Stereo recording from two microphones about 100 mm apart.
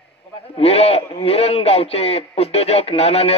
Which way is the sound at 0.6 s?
90° left.